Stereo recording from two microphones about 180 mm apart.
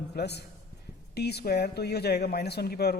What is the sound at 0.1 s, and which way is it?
A man's voice, 65° left (ahead or behind).